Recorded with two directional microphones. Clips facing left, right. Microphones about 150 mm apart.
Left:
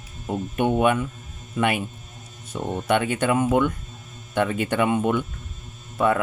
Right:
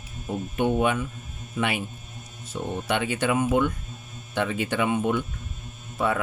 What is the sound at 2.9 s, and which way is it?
Speech, 50° left (ahead or behind).